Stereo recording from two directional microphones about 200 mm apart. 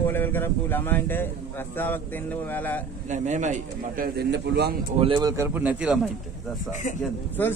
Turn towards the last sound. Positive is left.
turn(degrees=10)  # may be behind; listen again after turning